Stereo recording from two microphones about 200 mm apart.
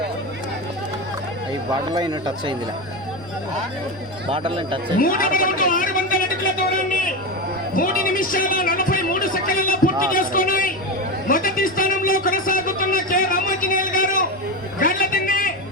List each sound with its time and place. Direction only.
2.0 s speech: 20° right (ahead or behind)
4.3 s speech: 25° right (ahead or behind)
4.9 s speech: 45° left (ahead or behind)
7.8 s a sound: 45° left (ahead or behind)